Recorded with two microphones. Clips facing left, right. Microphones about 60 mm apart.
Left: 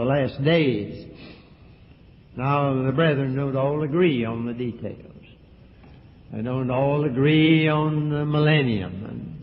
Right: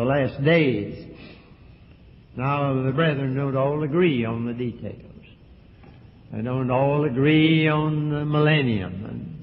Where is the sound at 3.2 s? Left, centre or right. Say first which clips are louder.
Even; centre.